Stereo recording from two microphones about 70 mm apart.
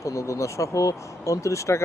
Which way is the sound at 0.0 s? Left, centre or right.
Left.